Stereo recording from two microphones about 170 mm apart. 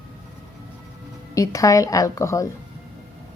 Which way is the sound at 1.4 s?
20° left (ahead or behind).